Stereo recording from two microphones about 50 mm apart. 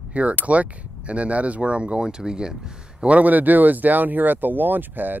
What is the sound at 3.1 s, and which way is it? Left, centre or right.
Speech, right.